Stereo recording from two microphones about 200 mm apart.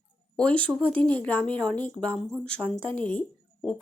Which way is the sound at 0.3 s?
5° left (ahead or behind).